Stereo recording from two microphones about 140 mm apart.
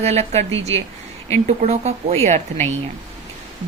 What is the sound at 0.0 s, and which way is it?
Speech, 50° right (ahead or behind).